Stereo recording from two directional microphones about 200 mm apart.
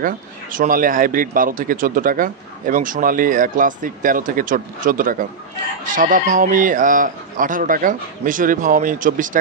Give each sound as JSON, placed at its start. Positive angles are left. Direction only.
{"t": 0.0, "sound": "speech", "side_deg": -45}